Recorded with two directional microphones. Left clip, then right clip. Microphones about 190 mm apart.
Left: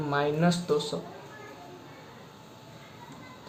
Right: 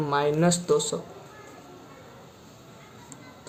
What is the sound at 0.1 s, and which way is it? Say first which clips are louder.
Speech: right 3 dB; 35° right (ahead or behind).